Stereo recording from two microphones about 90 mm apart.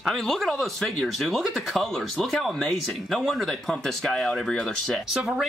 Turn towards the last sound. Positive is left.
turn(degrees=5)  # may be behind; listen again after turning